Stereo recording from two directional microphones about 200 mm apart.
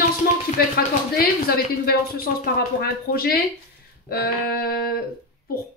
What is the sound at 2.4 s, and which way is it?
Speech, 50° left (ahead or behind).